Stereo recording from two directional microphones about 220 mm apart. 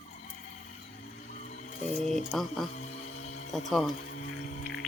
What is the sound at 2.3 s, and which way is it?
Speech, centre (ahead or behind).